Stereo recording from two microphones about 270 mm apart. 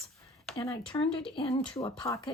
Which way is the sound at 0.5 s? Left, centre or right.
Centre.